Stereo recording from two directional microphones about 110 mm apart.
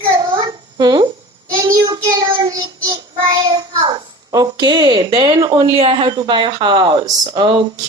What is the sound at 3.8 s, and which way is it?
Speech, 45° right (ahead or behind).